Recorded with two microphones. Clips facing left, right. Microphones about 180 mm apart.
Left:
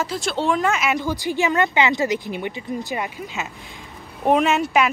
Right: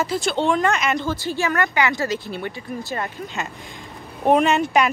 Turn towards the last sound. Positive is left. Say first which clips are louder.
# right 1 dB
turn(degrees=5)  # may be behind; listen again after turning